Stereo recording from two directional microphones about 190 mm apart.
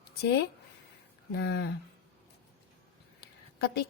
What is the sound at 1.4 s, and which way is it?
Speech, 65° left (ahead or behind).